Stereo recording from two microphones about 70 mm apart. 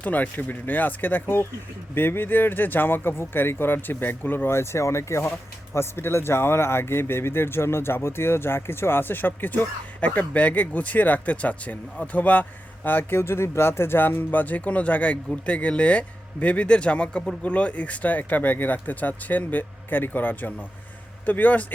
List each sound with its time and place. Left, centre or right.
0.0 s speech: left